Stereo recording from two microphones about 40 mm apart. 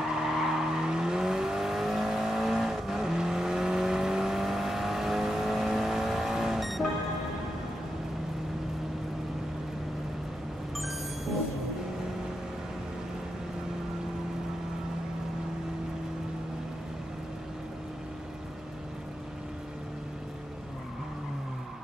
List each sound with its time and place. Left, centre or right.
0.1 s vehicle: centre